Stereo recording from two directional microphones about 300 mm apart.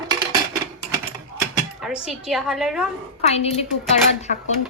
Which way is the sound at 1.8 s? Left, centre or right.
Centre.